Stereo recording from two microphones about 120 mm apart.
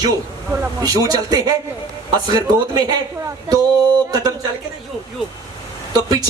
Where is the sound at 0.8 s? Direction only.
30° right (ahead or behind).